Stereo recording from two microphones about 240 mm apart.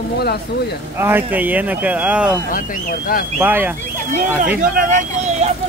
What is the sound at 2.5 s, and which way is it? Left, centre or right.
Speech, left.